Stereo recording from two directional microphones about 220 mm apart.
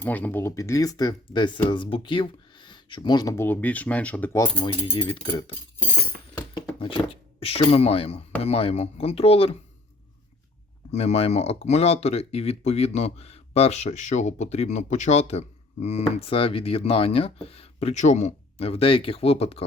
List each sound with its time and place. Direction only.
0.0 s speech: 5° left (ahead or behind); by 9.6 s 25° left (ahead or behind)
10.9 s speech: 30° left (ahead or behind)